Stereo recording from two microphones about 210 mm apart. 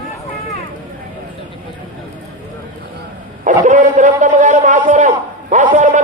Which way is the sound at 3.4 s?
35° right (ahead or behind).